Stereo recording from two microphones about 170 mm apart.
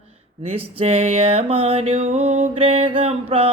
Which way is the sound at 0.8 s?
35° right (ahead or behind).